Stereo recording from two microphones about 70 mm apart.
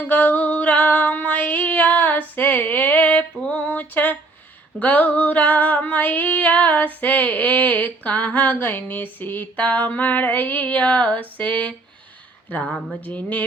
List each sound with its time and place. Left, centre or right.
0.1 s female singing: left
3.4 s a sound: centre
4.8 s female singing: left